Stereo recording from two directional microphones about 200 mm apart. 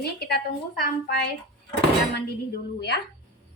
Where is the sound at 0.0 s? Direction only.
50° left (ahead or behind).